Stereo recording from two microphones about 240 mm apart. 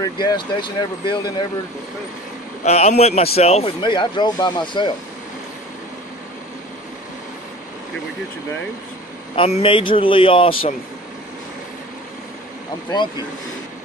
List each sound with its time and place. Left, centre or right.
0.0 s speech: centre
2.6 s speech: left
9.3 s speech: left